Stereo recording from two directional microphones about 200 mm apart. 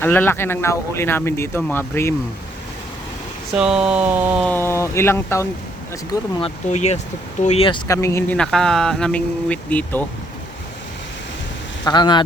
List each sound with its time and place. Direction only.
0.0 s speech: 10° left (ahead or behind)
3.5 s speech: 5° right (ahead or behind)
4.4 s speech: 10° left (ahead or behind)
6.4 s speech: 35° left (ahead or behind)
7.9 s speech: 15° left (ahead or behind)
8.4 s speech: 5° left (ahead or behind)
11.9 s speech: 20° left (ahead or behind)